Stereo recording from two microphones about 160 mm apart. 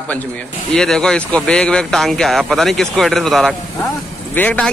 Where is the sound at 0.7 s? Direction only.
5° left (ahead or behind).